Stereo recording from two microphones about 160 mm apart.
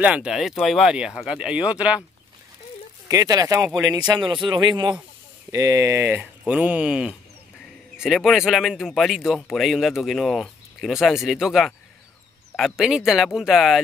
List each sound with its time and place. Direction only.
0.0 s speech: 5° right (ahead or behind)
3.1 s speech: 20° right (ahead or behind); by 13.7 s centre (ahead or behind)